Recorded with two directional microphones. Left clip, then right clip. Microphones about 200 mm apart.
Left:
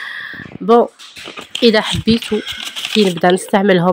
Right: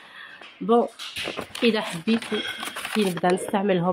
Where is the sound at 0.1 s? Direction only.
40° left (ahead or behind).